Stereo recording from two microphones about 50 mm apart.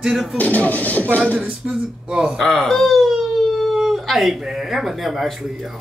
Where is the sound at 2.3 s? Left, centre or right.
Centre.